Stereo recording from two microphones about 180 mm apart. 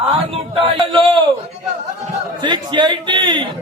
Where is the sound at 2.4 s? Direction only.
25° right (ahead or behind).